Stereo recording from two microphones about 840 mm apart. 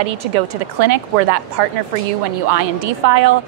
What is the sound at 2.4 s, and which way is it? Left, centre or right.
Speech, right.